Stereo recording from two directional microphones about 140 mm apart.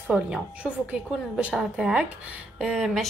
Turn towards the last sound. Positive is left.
turn(degrees=0)  # may be behind; listen again after turning